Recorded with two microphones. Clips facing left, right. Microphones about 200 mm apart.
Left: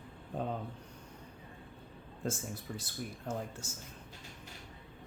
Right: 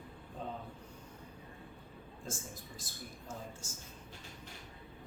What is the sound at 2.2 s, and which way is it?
Speech, 65° left (ahead or behind).